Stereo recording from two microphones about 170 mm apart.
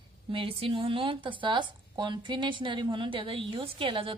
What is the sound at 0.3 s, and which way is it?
A woman's voice, 35° right (ahead or behind).